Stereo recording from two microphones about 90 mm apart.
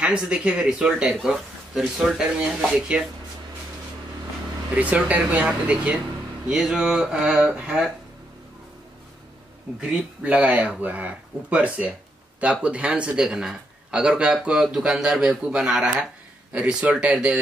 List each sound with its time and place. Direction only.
0.0 s a man's voice: 10° right (ahead or behind)
4.7 s a man's voice: 15° right (ahead or behind)
9.8 s a man's voice: 10° right (ahead or behind)